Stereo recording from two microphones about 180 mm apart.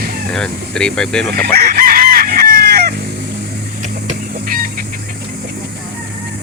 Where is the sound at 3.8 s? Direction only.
45° right (ahead or behind).